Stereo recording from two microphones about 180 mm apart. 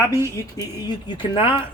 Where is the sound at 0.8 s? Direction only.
25° left (ahead or behind).